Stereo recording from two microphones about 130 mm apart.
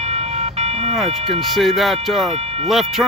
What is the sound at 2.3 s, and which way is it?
Music, 50° right (ahead or behind).